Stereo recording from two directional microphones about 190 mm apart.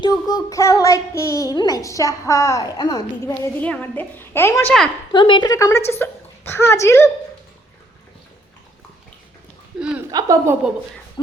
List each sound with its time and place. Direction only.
0.0 s a woman's voice: 20° left (ahead or behind)
5.1 s a woman's voice: 25° left (ahead or behind)
10.1 s a woman's voice: 20° right (ahead or behind)